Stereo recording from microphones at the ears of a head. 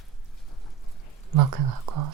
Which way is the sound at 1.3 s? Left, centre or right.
Right.